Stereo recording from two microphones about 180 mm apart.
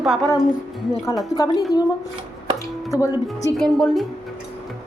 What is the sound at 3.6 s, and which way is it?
Speech, centre (ahead or behind).